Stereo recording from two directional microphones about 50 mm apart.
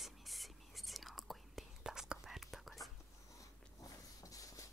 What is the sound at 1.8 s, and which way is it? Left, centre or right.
Whispering, centre.